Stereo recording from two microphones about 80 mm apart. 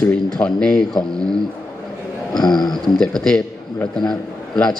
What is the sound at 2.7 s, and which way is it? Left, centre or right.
A man's voice, centre.